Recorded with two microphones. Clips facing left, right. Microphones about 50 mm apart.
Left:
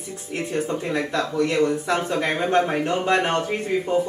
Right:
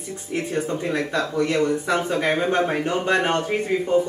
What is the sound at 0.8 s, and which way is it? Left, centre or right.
A man's voice, centre.